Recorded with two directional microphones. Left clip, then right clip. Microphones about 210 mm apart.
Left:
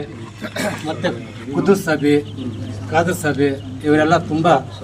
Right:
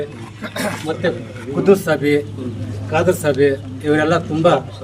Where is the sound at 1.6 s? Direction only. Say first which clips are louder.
Right 2 dB; 15° right (ahead or behind).